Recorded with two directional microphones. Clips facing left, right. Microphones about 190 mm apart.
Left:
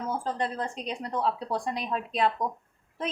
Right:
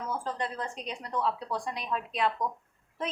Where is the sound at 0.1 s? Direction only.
25° left (ahead or behind).